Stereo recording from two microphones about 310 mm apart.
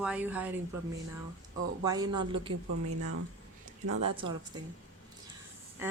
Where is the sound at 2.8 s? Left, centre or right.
Right.